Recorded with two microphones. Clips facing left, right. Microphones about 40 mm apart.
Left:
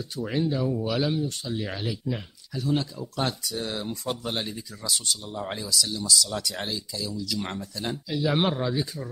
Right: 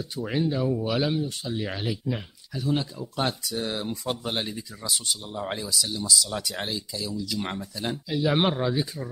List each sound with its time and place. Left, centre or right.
0.0 s speech: centre
3.9 s speech: centre
4.2 s speech: centre